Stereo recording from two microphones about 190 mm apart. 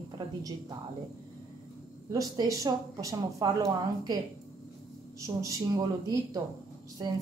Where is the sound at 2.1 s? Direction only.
20° right (ahead or behind).